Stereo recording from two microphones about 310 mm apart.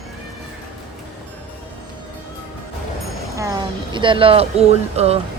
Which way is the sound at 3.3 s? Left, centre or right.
Centre.